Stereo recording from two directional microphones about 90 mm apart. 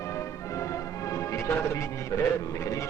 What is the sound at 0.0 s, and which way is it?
Speech, 35° left (ahead or behind).